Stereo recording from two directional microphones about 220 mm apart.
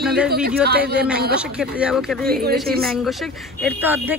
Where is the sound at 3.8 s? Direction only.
10° right (ahead or behind).